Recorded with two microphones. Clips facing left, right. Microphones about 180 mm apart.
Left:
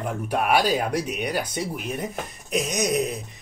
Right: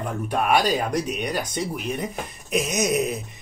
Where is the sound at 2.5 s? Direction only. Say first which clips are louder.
Right 1 dB; 5° right (ahead or behind).